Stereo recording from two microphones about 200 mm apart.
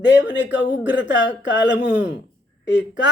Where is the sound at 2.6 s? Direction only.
60° left (ahead or behind).